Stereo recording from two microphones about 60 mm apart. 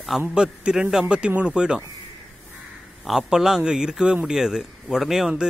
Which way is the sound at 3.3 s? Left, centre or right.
Centre.